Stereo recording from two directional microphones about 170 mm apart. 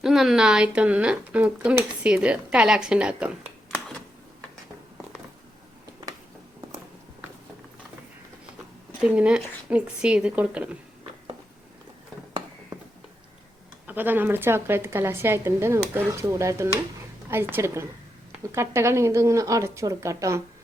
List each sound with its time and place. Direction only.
0.0 s speech: centre (ahead or behind)
3.7 s a sound: 10° left (ahead or behind)
9.0 s speech: 5° right (ahead or behind)
13.8 s speech: 10° right (ahead or behind)